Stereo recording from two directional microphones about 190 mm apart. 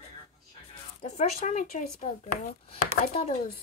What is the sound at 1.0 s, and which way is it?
Speech, 35° left (ahead or behind).